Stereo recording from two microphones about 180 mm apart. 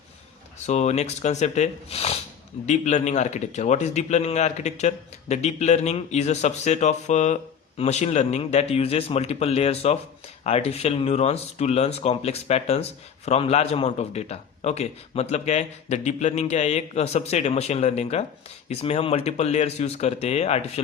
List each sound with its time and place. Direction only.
0.7 s speech: 40° left (ahead or behind)